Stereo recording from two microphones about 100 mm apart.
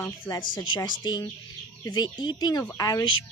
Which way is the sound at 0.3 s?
50° left (ahead or behind).